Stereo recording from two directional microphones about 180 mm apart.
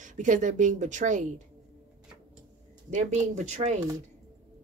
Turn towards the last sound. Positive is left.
turn(degrees=-40)  # may be behind; listen again after turning